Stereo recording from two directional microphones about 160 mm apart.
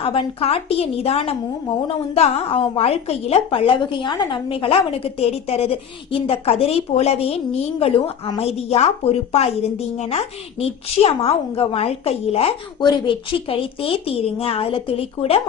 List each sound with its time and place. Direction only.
0.0 s a woman's voice: 35° left (ahead or behind)